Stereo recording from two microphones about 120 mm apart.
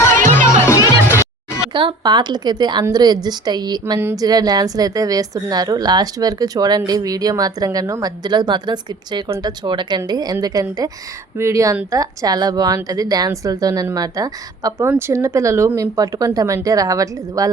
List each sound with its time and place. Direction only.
0.2 s music: 90° right
0.4 s music: 25° left (ahead or behind)
0.8 s music: 30° right (ahead or behind)
1.0 s music: 25° left (ahead or behind)
1.7 s a woman's voice: 40° right (ahead or behind)